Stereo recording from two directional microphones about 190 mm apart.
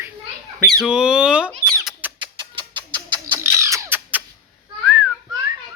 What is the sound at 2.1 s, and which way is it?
Bird, 25° right (ahead or behind).